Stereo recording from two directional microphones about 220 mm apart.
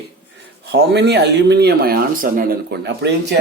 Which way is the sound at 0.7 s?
50° right (ahead or behind).